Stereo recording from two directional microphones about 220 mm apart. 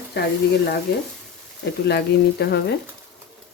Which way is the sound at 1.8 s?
45° left (ahead or behind).